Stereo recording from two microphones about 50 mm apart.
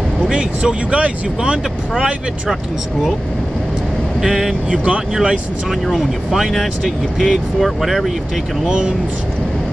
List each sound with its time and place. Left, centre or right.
0.3 s speech: centre
4.2 s speech: centre
4.6 s speech: right
5.1 s speech: centre
5.9 s speech: centre
8.6 s speech: right